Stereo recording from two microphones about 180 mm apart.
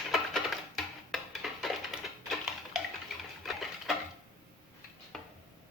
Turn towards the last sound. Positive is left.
turn(degrees=0)  # may be behind; listen again after turning